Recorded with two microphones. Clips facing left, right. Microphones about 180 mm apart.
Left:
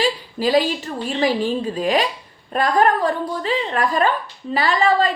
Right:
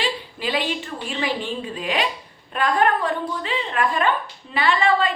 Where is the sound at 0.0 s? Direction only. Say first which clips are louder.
Left 6 dB; 40° left (ahead or behind).